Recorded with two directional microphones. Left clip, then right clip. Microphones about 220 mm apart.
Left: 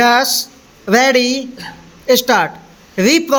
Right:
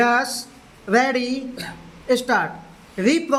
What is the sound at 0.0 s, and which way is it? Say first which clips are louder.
A man's voice: left 7 dB; 40° left (ahead or behind).